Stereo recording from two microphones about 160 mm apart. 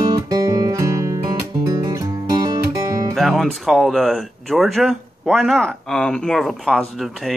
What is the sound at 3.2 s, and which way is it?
Speech, centre (ahead or behind).